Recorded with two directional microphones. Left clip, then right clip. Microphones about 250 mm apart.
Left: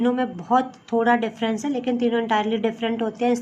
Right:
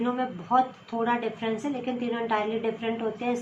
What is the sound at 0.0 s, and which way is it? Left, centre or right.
A woman's voice, left.